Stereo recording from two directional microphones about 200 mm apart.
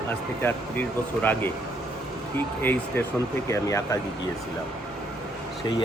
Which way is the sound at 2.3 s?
10° left (ahead or behind).